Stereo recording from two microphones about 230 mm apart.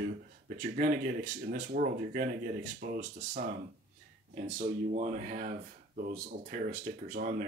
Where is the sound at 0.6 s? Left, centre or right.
Right.